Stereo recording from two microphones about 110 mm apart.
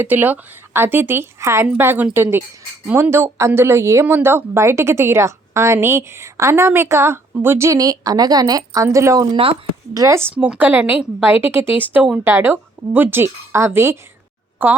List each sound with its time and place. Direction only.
0.0 s a woman's voice: 15° right (ahead or behind)
10.3 s a woman's voice: 15° right (ahead or behind)